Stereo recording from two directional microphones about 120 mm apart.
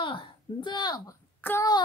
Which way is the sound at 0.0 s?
40° left (ahead or behind).